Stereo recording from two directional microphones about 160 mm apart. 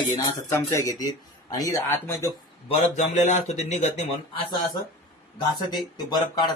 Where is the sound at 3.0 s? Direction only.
45° left (ahead or behind).